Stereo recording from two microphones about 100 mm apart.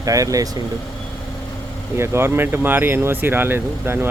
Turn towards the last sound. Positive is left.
turn(degrees=-20)  # may be behind; listen again after turning